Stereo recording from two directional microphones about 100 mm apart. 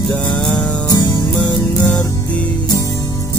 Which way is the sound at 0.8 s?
45° left (ahead or behind).